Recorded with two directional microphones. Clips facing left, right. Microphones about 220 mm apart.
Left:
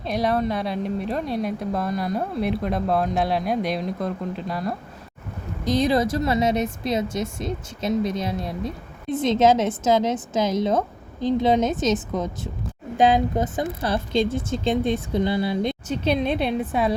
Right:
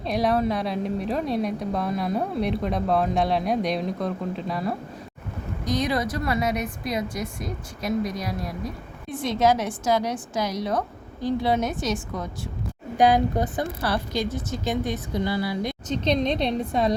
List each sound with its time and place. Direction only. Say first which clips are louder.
0.0 s a woman's voice: even; centre (ahead or behind)
5.6 s a woman's voice: left 5 dB; 25° left (ahead or behind)
15.9 s a woman's voice: right 1 dB; 5° left (ahead or behind)